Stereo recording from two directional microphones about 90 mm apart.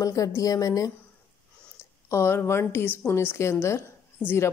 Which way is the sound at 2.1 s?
30° left (ahead or behind).